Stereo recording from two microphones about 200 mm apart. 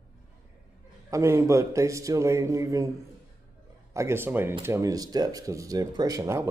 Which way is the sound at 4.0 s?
10° right (ahead or behind).